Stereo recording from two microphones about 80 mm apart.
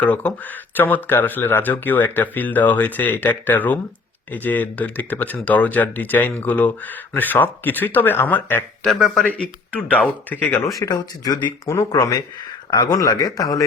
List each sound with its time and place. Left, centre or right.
0.0 s speech: centre
8.8 s speech: centre
9.4 s speech: centre
10.7 s a man's voice: left
10.9 s speech: left
11.9 s a man's voice: left